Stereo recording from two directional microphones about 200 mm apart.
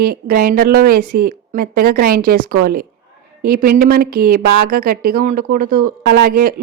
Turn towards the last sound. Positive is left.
turn(degrees=-50)  # may be behind; listen again after turning